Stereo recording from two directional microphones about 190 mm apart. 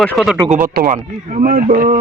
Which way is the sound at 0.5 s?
50° right (ahead or behind).